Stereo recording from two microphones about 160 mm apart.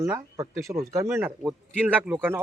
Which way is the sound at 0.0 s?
15° right (ahead or behind).